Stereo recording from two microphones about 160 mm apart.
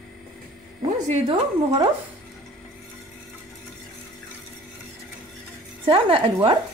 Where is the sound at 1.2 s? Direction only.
30° right (ahead or behind).